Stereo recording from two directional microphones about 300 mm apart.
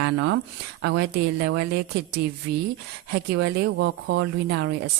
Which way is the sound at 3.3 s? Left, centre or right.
Right.